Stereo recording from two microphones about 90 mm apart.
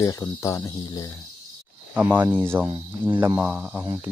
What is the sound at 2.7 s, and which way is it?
Speech, 60° right (ahead or behind).